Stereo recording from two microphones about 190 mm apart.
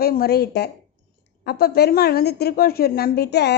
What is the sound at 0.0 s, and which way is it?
A woman's voice, 55° left (ahead or behind).